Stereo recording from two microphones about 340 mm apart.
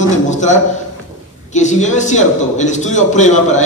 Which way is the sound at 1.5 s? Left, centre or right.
Left.